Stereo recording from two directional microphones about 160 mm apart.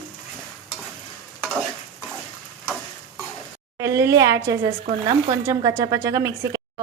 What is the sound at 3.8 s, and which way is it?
Speech, 20° right (ahead or behind).